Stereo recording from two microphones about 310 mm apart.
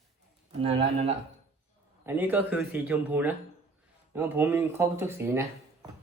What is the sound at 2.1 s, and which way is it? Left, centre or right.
Speech, centre.